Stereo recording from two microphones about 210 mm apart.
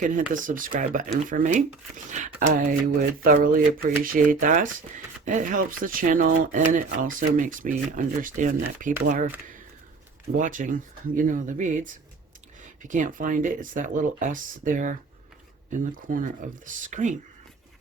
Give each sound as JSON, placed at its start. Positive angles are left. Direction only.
{"t": 0.0, "sound": "speech", "side_deg": -40}
{"t": 10.3, "sound": "speech", "side_deg": -40}